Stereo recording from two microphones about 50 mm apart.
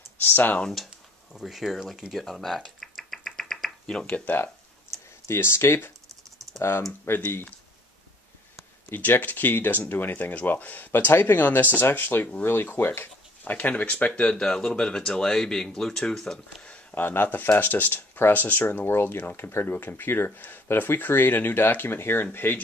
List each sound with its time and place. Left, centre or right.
0.2 s speech: left
1.4 s speech: centre
2.8 s a sound: centre
3.8 s speech: left
4.9 s clicking: centre
5.3 s speech: left
8.9 s speech: left
13.4 s speech: left
14.3 s speech: centre
16.9 s speech: left